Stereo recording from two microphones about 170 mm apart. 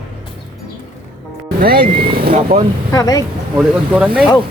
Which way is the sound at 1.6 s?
60° right (ahead or behind).